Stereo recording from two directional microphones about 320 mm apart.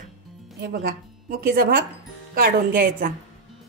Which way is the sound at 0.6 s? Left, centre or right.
Right.